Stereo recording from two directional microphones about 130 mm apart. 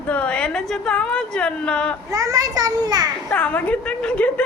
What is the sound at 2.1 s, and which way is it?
Speech, 25° right (ahead or behind).